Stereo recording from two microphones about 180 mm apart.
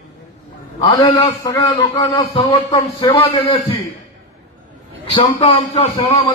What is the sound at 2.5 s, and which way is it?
Speech, 15° left (ahead or behind).